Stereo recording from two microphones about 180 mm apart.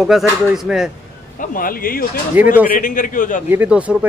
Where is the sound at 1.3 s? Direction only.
50° left (ahead or behind).